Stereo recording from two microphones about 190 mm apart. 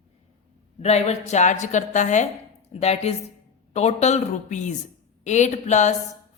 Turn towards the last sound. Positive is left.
turn(degrees=40)  # may be behind; listen again after turning